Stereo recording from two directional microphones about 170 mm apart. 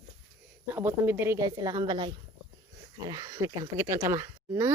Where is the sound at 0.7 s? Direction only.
15° right (ahead or behind).